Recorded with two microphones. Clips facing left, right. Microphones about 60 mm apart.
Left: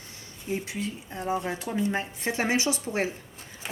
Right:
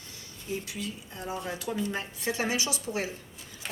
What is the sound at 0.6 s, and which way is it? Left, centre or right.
Speech, left.